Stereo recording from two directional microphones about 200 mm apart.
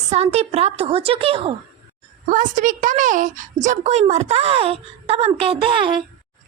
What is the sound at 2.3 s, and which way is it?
Speech, 40° right (ahead or behind).